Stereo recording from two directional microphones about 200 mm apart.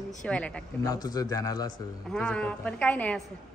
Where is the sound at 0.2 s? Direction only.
5° left (ahead or behind).